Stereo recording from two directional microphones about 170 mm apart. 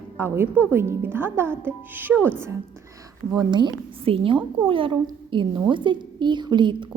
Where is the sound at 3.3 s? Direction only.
25° right (ahead or behind).